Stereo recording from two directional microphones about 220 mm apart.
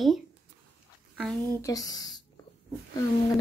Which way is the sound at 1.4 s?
15° left (ahead or behind).